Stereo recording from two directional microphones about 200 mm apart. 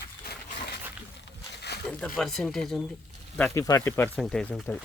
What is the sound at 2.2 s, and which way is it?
Speech, centre (ahead or behind).